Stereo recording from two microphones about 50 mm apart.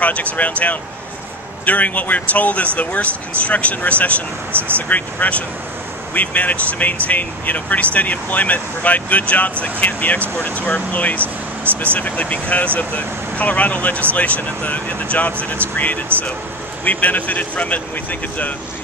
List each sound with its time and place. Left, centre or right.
0.0 s speech: left
4.5 s speech: right
4.7 s speech: left
11.1 s speech: right
11.8 s speech: left